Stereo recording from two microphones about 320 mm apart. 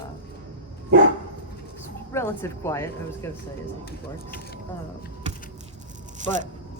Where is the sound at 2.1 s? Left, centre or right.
Centre.